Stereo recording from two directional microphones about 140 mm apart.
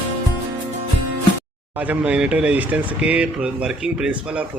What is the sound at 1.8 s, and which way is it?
Speech, 10° right (ahead or behind).